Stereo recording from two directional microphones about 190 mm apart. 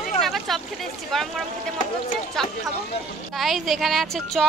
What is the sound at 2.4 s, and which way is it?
A woman's voice, centre (ahead or behind).